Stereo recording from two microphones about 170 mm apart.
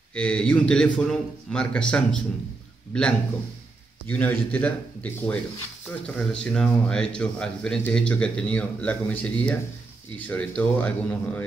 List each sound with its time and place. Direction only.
0.1 s a man's voice: 5° left (ahead or behind)